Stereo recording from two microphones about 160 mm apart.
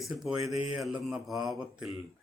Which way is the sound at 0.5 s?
40° left (ahead or behind).